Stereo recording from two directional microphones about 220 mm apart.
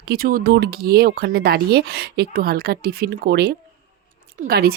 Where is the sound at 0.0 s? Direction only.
45° right (ahead or behind).